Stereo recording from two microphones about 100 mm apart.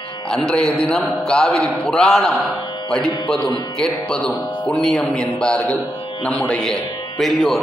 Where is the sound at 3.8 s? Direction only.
5° left (ahead or behind).